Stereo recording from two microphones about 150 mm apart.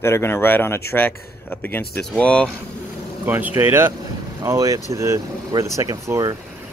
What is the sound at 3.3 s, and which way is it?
Speech, 15° right (ahead or behind).